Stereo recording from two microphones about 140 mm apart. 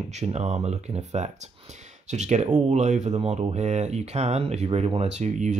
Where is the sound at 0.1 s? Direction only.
50° right (ahead or behind).